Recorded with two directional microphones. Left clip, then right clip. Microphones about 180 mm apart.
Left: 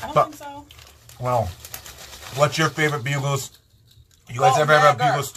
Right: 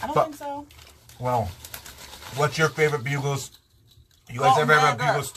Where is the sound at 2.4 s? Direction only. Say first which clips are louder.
Left 2 dB; 25° left (ahead or behind).